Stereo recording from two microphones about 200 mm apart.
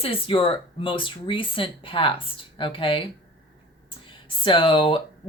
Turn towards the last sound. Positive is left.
turn(degrees=25)  # may be behind; listen again after turning